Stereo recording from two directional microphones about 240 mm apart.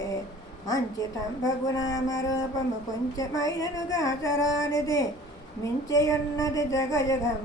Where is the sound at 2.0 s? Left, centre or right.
Left.